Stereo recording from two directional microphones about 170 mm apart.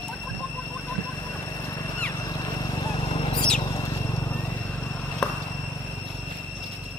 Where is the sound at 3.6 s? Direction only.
20° left (ahead or behind); by 5.4 s 5° left (ahead or behind).